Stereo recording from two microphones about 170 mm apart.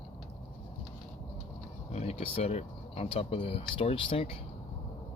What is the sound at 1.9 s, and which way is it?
Speech, 40° left (ahead or behind).